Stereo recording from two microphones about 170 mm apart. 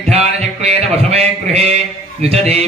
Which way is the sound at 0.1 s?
40° right (ahead or behind).